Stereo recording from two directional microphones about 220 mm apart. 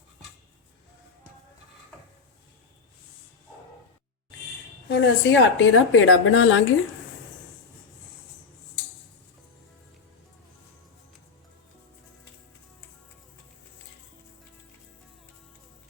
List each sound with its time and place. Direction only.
4.9 s a woman's voice: 55° left (ahead or behind)